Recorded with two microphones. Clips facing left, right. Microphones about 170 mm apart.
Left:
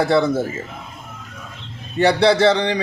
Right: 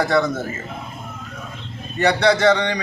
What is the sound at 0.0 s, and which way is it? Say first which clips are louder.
Speech: left 2 dB; 30° left (ahead or behind).